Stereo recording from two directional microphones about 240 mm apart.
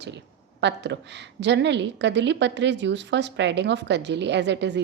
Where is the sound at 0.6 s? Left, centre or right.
Right.